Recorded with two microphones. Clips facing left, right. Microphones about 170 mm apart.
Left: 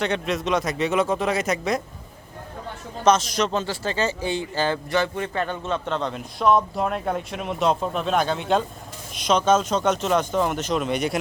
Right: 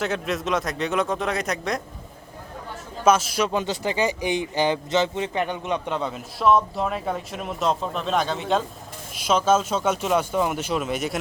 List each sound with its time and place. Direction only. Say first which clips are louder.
0.0 s speech: left 1 dB; centre (ahead or behind)
3.0 s a man's voice: even; 5° right (ahead or behind)